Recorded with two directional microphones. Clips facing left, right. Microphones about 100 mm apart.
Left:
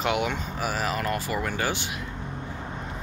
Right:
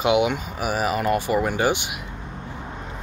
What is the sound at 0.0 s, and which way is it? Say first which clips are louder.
Speech: right 6 dB; 15° right (ahead or behind).